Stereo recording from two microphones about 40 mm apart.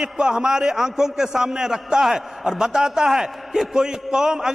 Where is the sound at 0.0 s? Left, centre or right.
Centre.